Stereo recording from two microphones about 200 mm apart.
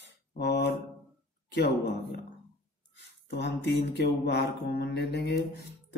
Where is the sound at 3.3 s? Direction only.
60° left (ahead or behind).